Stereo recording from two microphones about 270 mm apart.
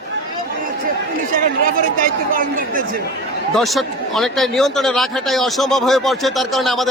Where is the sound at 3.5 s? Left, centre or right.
Centre.